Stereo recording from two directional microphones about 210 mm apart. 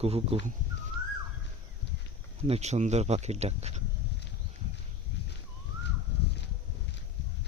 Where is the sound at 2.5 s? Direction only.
30° right (ahead or behind).